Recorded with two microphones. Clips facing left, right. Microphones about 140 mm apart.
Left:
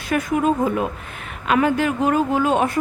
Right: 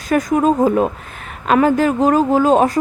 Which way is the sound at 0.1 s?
40° right (ahead or behind).